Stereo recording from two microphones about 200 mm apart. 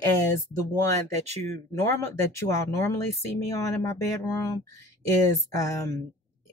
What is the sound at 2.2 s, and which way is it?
Speech, 15° left (ahead or behind).